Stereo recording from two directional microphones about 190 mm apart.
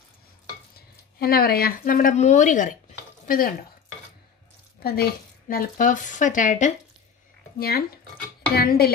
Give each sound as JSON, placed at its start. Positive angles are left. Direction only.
{"t": 1.2, "sound": "speech", "side_deg": 55}
{"t": 4.8, "sound": "speech", "side_deg": 55}
{"t": 7.5, "sound": "speech", "side_deg": 55}